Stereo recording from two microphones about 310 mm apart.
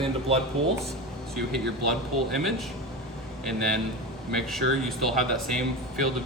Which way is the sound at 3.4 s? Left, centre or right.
Centre.